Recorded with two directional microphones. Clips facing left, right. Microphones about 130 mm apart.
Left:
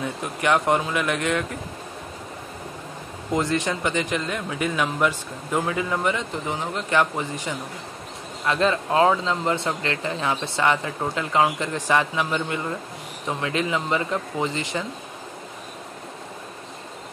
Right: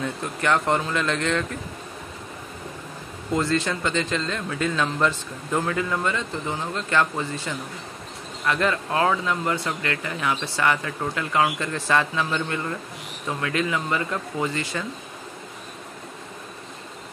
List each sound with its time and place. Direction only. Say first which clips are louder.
0.0 s speech: left 1 dB; 15° left (ahead or behind)
3.3 s speech: even; 15° left (ahead or behind)